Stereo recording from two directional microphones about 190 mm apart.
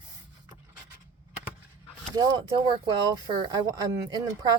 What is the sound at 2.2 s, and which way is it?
Speech, 20° right (ahead or behind).